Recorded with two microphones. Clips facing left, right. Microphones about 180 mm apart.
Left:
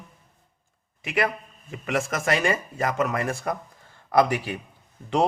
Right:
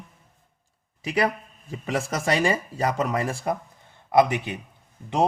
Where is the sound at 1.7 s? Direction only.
30° right (ahead or behind).